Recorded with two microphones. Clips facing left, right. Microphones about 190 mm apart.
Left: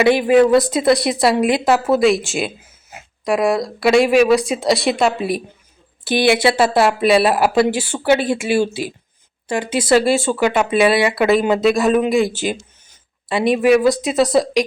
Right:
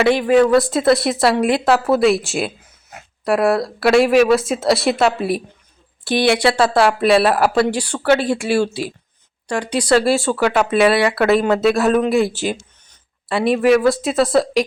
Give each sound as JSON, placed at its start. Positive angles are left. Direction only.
{"t": 0.1, "sound": "speech", "side_deg": 10}
{"t": 14.2, "sound": "speech", "side_deg": 20}